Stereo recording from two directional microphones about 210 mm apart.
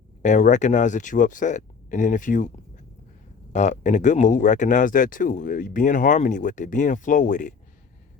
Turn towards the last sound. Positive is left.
turn(degrees=35)  # may be behind; listen again after turning